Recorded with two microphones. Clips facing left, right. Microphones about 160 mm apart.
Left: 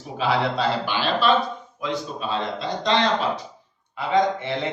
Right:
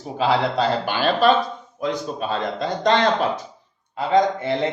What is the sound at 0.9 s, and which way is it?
A man's voice, 50° right (ahead or behind).